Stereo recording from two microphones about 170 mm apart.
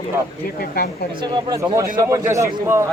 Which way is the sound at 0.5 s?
60° left (ahead or behind).